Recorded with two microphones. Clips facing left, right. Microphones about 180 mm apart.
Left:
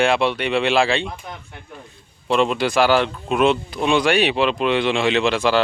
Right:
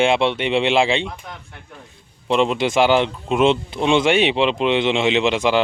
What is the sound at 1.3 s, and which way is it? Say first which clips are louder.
Speech: left 2 dB; 5° left (ahead or behind).